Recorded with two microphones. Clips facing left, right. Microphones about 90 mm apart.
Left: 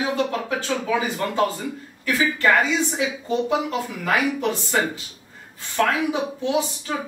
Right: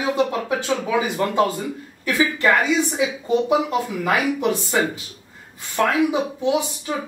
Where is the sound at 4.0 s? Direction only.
15° right (ahead or behind).